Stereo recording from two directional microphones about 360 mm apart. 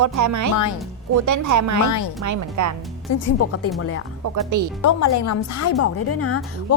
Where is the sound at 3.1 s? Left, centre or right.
Left.